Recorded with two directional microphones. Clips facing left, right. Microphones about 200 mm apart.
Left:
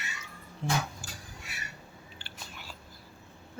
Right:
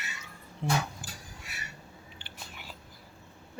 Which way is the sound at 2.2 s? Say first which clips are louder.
Left 1 dB; 15° right (ahead or behind).